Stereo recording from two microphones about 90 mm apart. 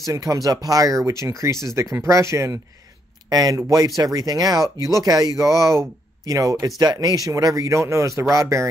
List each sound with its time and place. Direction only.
0.0 s speech: 40° right (ahead or behind)
3.3 s speech: 45° right (ahead or behind)